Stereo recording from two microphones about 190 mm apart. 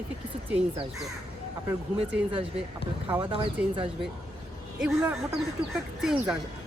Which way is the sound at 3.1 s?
25° right (ahead or behind).